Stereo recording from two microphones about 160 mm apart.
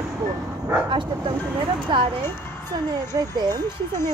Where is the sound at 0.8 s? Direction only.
30° right (ahead or behind).